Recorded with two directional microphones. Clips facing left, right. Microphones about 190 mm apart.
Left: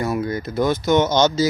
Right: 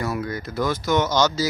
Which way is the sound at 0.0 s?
25° left (ahead or behind).